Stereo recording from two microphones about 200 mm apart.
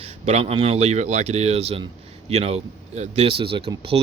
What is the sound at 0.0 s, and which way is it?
Speech, 30° right (ahead or behind).